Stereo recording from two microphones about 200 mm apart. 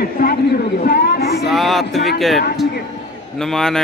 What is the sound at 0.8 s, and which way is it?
Chatter, 55° left (ahead or behind).